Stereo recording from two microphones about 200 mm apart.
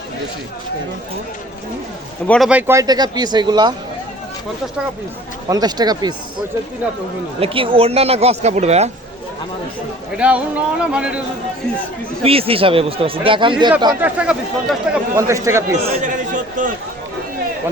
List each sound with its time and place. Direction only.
2.2 s speech: 5° left (ahead or behind)
2.5 s speech: 10° right (ahead or behind)
5.5 s speech: 20° right (ahead or behind)
7.3 s speech: 25° right (ahead or behind)
10.2 s speech: 5° right (ahead or behind)
12.2 s speech: 30° right (ahead or behind)
14.0 s a man's voice: 5° right (ahead or behind)
16.0 s chatter: 40° right (ahead or behind)